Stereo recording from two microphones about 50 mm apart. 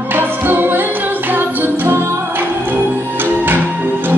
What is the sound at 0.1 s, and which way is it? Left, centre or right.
Music, right.